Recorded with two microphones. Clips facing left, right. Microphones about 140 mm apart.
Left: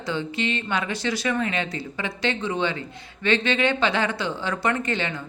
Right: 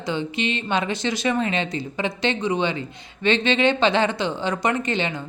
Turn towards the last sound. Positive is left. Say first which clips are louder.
# right 2 dB
turn(degrees=-20)  # may be behind; listen again after turning